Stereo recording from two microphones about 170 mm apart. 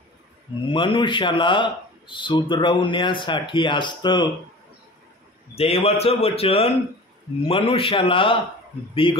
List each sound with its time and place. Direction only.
0.7 s speech: 30° left (ahead or behind)
5.6 s a man's voice: 35° left (ahead or behind)